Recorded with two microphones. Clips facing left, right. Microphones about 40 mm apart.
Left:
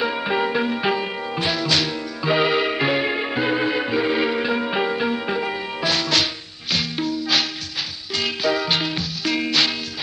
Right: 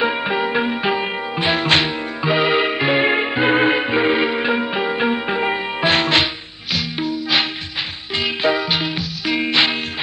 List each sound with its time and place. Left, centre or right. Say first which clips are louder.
0.0 s music: right 4 dB; right
0.3 s music: right 2 dB; centre
1.5 s music: right 6 dB; right
2.2 s music: right 2 dB; centre
3.0 s music: right 5 dB; right
4.6 s music: right 1 dB; centre
4.9 s music: right 3 dB; right
6.7 s music: right 1 dB; centre